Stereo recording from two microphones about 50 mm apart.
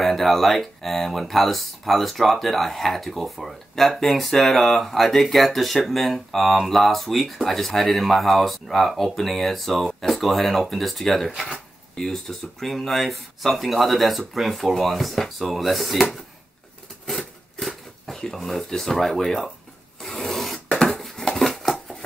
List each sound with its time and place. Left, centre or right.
0.0 s speech: centre
17.0 s a sound: centre
20.0 s filing: centre